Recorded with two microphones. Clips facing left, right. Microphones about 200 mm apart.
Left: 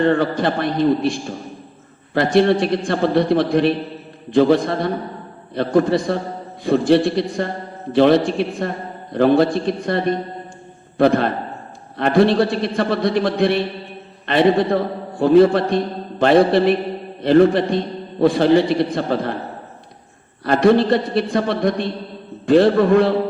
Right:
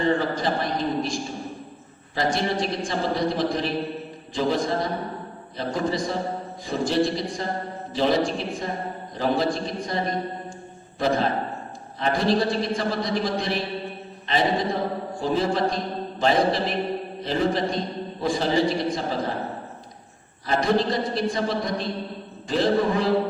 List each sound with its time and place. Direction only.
0.0 s a man's voice: 60° left (ahead or behind)
2.1 s a man's voice: 60° left (ahead or behind)
20.4 s a man's voice: 60° left (ahead or behind)